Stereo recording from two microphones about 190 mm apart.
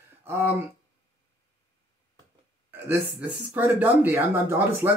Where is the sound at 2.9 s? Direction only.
10° right (ahead or behind).